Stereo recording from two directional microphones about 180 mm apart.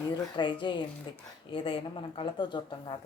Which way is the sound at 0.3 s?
25° left (ahead or behind).